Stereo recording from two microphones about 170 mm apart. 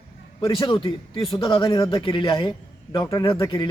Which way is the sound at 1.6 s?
20° left (ahead or behind).